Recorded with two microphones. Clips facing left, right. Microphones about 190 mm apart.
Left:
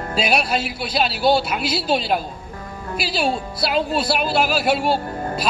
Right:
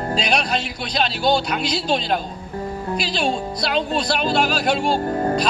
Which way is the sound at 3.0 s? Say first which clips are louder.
Left 2 dB; 5° left (ahead or behind).